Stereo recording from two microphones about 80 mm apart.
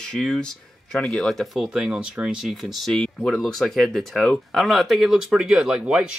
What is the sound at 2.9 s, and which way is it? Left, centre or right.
Speech, centre.